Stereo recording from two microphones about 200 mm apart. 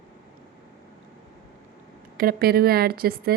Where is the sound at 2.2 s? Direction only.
50° right (ahead or behind).